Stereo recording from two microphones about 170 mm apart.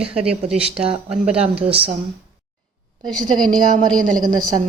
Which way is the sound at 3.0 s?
5° left (ahead or behind).